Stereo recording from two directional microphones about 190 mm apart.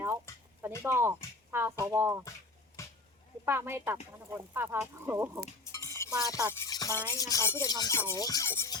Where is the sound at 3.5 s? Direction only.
10° right (ahead or behind).